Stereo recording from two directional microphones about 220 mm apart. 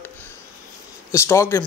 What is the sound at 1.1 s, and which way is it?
Speech, 10° left (ahead or behind).